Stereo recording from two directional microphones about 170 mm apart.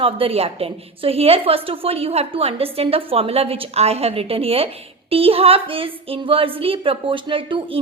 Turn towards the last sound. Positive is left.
turn(degrees=-30)  # may be behind; listen again after turning